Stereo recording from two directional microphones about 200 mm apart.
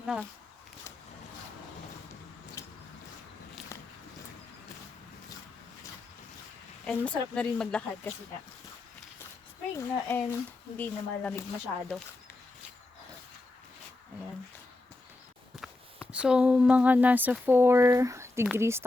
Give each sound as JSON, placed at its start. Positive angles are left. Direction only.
{"t": 0.0, "sound": "speech", "side_deg": -5}
{"t": 2.6, "sound": "a sound", "side_deg": 15}
{"t": 6.8, "sound": "speech", "side_deg": 5}
{"t": 9.7, "sound": "speech", "side_deg": 10}
{"t": 15.5, "sound": "a woman's voice", "side_deg": 0}